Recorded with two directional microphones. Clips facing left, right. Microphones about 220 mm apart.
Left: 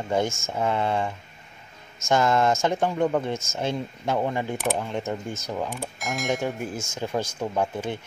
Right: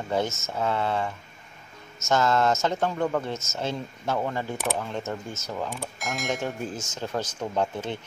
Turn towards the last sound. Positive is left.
turn(degrees=10)  # may be behind; listen again after turning